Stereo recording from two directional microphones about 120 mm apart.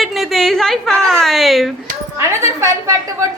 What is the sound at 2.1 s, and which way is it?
Speech, 25° right (ahead or behind).